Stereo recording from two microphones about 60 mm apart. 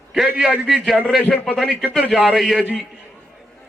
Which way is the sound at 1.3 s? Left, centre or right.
Centre.